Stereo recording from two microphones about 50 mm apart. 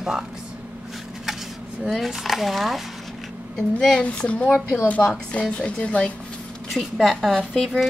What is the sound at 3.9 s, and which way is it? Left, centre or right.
A woman's voice, left.